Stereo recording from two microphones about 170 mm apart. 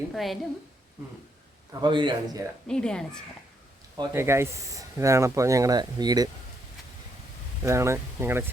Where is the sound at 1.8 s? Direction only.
30° right (ahead or behind).